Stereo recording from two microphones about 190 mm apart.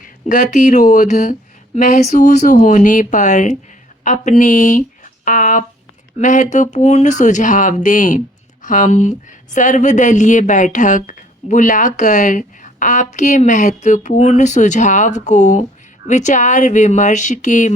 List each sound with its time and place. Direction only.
0.3 s speech: 40° left (ahead or behind)